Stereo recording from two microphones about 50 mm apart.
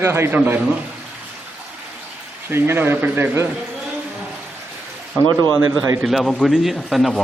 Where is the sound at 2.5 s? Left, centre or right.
Right.